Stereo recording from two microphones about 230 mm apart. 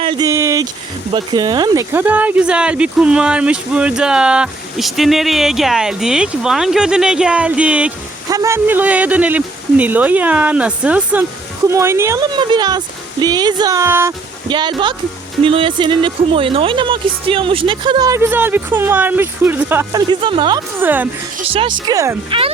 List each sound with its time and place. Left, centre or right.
0.0 s speech: centre
20.7 s speech: centre
21.3 s speech: right